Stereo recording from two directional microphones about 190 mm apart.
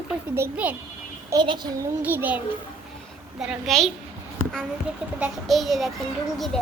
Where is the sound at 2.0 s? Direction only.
10° right (ahead or behind).